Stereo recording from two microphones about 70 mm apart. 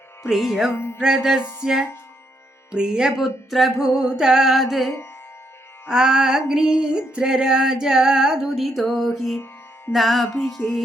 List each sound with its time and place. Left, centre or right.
0.3 s music: centre
0.7 s music: left
0.9 s music: centre
5.9 s music: centre